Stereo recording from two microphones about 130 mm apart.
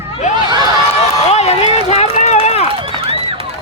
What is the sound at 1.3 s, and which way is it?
Run, 55° left (ahead or behind).